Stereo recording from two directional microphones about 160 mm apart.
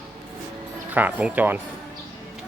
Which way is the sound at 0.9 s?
10° right (ahead or behind).